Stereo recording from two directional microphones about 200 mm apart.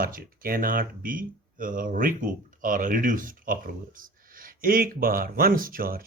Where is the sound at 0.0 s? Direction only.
45° right (ahead or behind).